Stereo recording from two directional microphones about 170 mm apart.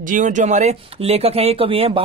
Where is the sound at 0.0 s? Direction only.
50° right (ahead or behind).